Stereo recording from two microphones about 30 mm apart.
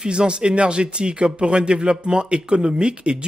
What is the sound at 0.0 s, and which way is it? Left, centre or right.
Speech, right.